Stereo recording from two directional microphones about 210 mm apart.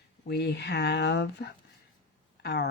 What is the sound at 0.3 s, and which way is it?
Speech, 50° left (ahead or behind).